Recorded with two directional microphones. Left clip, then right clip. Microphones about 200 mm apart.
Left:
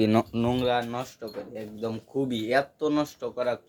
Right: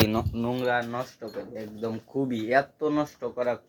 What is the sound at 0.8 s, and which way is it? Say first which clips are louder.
Speech: even; centre (ahead or behind).